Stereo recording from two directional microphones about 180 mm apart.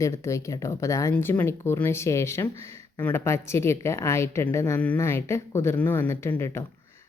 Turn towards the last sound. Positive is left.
turn(degrees=15)  # may be behind; listen again after turning